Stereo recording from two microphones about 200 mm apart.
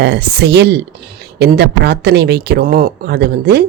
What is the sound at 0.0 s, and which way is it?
A woman's voice, 55° right (ahead or behind).